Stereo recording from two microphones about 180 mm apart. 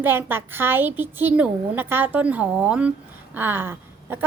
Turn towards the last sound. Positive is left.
turn(degrees=-10)  # may be behind; listen again after turning